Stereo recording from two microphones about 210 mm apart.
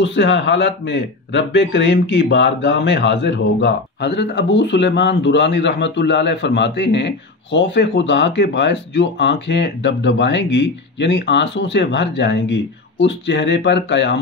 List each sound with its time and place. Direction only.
0.0 s speech: 60° left (ahead or behind)